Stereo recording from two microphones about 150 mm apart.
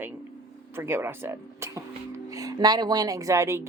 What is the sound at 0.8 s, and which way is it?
A woman's voice, 15° right (ahead or behind).